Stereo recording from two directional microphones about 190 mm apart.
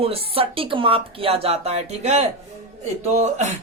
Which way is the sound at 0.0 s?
30° right (ahead or behind).